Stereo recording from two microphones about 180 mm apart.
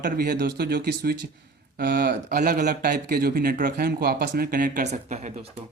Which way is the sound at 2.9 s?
60° right (ahead or behind).